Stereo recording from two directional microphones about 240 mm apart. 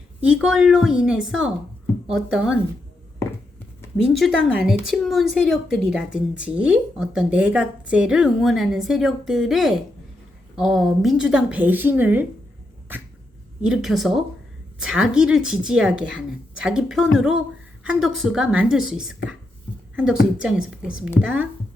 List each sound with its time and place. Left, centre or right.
0.2 s a woman's voice: centre
3.9 s a woman's voice: centre
13.6 s a woman's voice: centre